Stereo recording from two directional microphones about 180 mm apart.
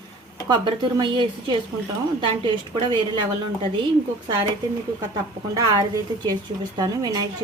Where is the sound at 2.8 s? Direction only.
25° right (ahead or behind).